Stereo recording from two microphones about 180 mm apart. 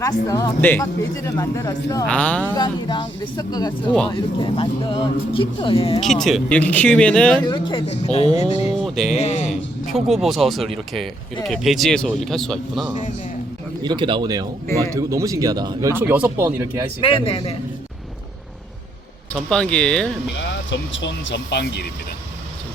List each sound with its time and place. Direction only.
0.0 s speech: 20° left (ahead or behind)
2.0 s speech: 5° left (ahead or behind)
2.6 s speech: 25° left (ahead or behind)
6.0 s speech: centre (ahead or behind)
7.4 s a man's voice: 25° left (ahead or behind)
9.9 s speech: centre (ahead or behind)
13.8 s speech: 25° right (ahead or behind); by 16.8 s 10° right (ahead or behind)
17.0 s a man's voice: 30° left (ahead or behind)
19.3 s speech: 5° left (ahead or behind)
20.7 s speech: 90° left; by 21.8 s 70° left (ahead or behind)